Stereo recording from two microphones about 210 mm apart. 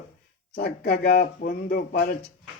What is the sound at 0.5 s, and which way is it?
Speech, 50° left (ahead or behind).